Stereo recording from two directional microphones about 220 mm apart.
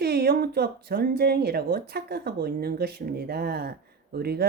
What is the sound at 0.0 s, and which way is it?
Speech, 45° right (ahead or behind).